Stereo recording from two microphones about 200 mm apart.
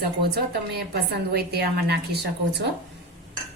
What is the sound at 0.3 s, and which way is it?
A woman's voice, 55° right (ahead or behind).